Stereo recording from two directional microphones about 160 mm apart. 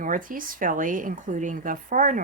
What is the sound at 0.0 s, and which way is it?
Speech, 60° right (ahead or behind).